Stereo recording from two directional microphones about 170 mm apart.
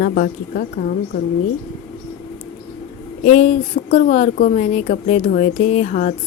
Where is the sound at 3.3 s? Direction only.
40° left (ahead or behind).